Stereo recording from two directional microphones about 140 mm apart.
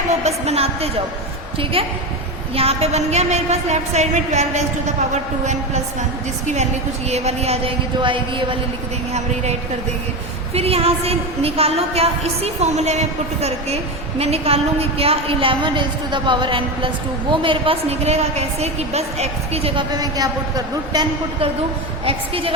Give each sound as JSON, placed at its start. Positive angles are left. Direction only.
{"t": 0.1, "sound": "a woman's voice", "side_deg": -50}
{"t": 2.6, "sound": "a woman's voice", "side_deg": -45}
{"t": 7.1, "sound": "a woman's voice", "side_deg": -45}
{"t": 9.1, "sound": "a woman's voice", "side_deg": -55}
{"t": 19.9, "sound": "a woman's voice", "side_deg": -25}
{"t": 22.0, "sound": "a woman's voice", "side_deg": -40}